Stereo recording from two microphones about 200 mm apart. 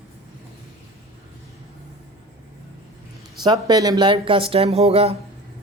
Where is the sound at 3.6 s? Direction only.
20° right (ahead or behind).